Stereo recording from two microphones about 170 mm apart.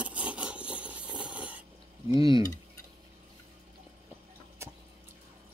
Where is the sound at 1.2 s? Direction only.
5° right (ahead or behind).